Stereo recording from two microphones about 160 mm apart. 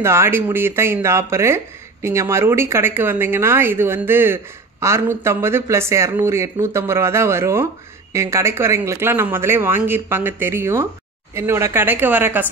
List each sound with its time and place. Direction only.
0.0 s speech: 15° right (ahead or behind)